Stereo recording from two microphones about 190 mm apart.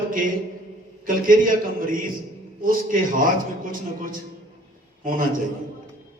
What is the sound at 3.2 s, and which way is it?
Speech, 45° right (ahead or behind).